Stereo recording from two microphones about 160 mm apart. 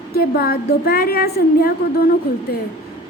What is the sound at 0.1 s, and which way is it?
A woman's voice, 75° left (ahead or behind).